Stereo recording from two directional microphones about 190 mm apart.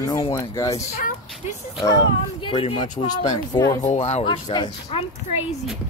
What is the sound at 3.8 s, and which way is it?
Speech, 35° left (ahead or behind).